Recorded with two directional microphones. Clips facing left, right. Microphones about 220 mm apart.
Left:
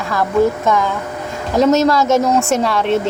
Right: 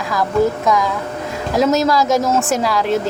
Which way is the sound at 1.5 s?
Centre (ahead or behind).